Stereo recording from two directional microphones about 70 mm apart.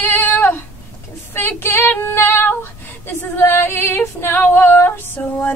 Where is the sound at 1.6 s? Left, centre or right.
Left.